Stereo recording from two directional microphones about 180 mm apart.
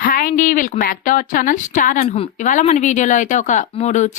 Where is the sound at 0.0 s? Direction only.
50° left (ahead or behind).